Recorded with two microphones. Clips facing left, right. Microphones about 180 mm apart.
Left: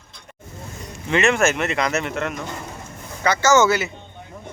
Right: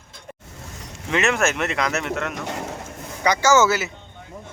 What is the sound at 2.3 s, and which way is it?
Speech, 75° right (ahead or behind).